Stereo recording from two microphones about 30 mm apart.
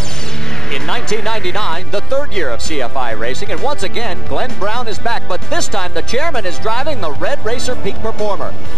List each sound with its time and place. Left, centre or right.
0.7 s speech: centre